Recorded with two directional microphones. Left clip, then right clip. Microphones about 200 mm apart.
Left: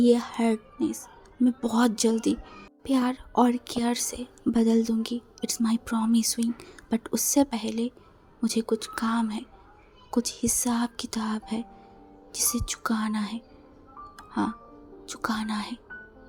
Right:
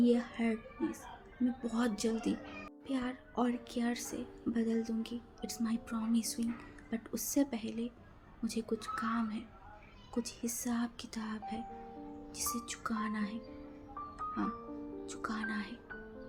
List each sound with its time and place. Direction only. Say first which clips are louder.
0.0 s a woman's voice: left 9 dB; 50° left (ahead or behind)
14.2 s music: left 8 dB; 45° left (ahead or behind)
15.0 s a woman's voice: left 10 dB; 45° left (ahead or behind)